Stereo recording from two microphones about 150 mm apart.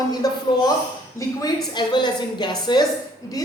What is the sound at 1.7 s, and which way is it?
A woman's voice, 30° left (ahead or behind).